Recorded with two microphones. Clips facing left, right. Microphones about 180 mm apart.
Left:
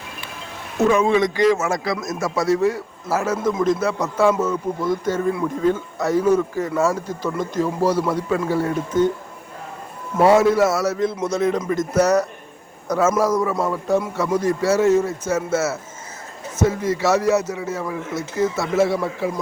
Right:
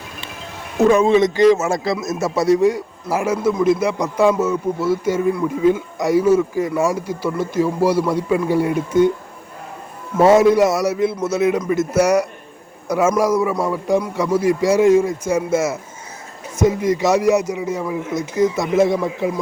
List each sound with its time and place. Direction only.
0.9 s speech: 30° right (ahead or behind); by 9.1 s 10° right (ahead or behind)
10.2 s speech: 20° right (ahead or behind)